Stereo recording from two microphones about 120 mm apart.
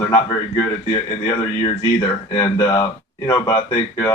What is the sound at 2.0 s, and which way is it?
Speech, 35° left (ahead or behind).